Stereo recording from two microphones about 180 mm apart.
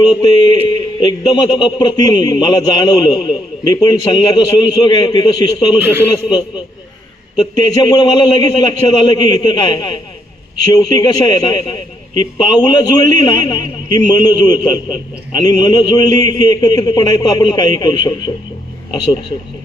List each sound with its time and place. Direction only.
0.2 s speech: 25° left (ahead or behind)
5.8 s a man's voice: 15° right (ahead or behind)
7.3 s speech: 25° left (ahead or behind)